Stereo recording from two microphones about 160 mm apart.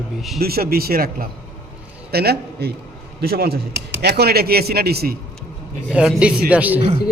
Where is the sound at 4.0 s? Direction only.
90° right.